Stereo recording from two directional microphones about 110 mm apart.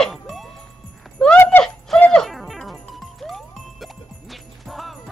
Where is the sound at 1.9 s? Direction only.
5° left (ahead or behind).